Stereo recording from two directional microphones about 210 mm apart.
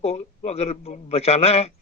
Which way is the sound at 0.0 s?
30° left (ahead or behind).